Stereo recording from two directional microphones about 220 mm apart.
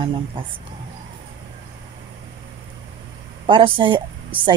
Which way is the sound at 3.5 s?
20° right (ahead or behind).